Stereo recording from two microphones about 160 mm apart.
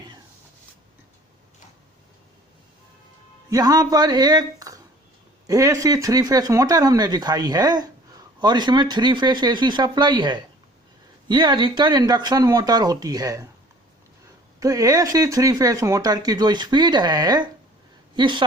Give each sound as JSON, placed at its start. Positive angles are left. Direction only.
{"t": 3.5, "sound": "speech", "side_deg": -25}
{"t": 14.6, "sound": "speech", "side_deg": -20}